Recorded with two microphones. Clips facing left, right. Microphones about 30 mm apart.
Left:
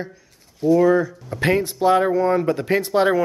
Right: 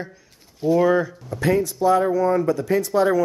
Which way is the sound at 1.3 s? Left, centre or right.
Left.